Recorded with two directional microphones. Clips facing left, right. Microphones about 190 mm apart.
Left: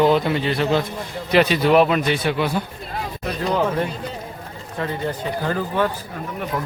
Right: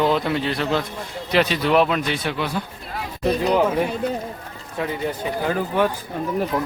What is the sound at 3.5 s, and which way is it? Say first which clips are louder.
Speech: even; 10° right (ahead or behind).